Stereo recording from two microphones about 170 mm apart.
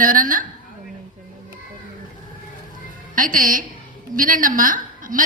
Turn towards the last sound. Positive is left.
turn(degrees=-55)  # may be behind; listen again after turning